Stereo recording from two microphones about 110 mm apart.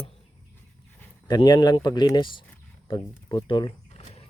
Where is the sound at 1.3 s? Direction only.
40° left (ahead or behind).